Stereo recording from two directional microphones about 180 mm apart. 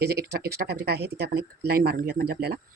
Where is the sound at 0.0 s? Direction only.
65° right (ahead or behind).